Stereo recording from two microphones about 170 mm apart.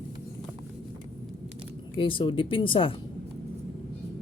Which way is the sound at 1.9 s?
30° left (ahead or behind).